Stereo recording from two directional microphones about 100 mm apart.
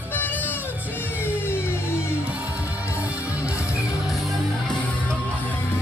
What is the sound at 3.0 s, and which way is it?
Music, 15° right (ahead or behind).